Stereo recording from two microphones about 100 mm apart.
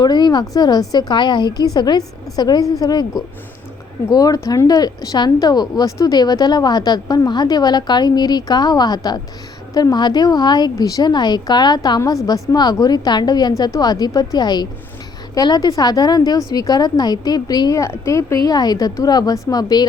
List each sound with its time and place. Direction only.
0.0 s a woman's voice: 45° left (ahead or behind)
4.1 s a woman's voice: 40° left (ahead or behind)
18.4 s a woman's voice: 40° left (ahead or behind)